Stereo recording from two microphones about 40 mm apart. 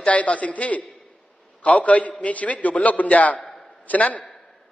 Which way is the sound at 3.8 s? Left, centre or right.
Left.